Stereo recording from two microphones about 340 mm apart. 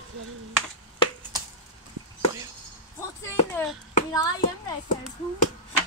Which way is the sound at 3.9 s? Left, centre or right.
Centre.